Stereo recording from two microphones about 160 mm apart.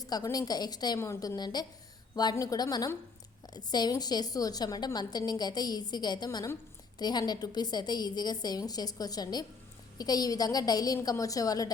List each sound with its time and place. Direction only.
0.0 s a woman's voice: 20° left (ahead or behind)